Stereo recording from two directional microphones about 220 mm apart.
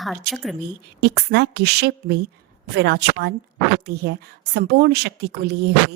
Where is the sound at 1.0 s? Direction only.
45° right (ahead or behind).